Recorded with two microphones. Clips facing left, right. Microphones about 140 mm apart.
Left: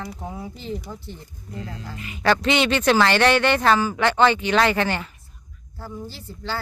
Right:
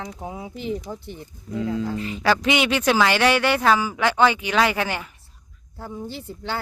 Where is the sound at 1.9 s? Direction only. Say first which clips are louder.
Right 9 dB; 30° right (ahead or behind).